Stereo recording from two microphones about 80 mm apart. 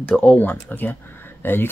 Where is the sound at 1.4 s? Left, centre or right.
Left.